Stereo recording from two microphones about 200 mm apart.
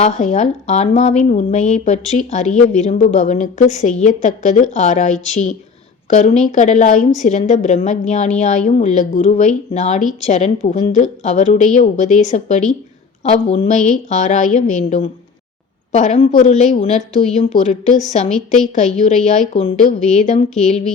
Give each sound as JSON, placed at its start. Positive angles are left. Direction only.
{"t": 0.0, "sound": "a woman's voice", "side_deg": 35}